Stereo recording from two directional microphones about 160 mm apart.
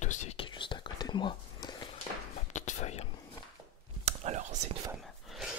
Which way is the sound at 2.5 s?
50° left (ahead or behind).